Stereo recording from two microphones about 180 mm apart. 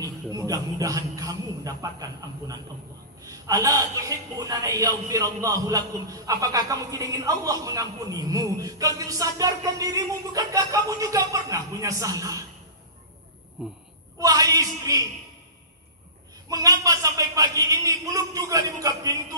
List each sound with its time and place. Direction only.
0.0 s a man's voice: 20° right (ahead or behind)
13.6 s speech: 5° right (ahead or behind)
14.1 s a man's voice: 20° right (ahead or behind)
16.4 s a man's voice: 20° right (ahead or behind)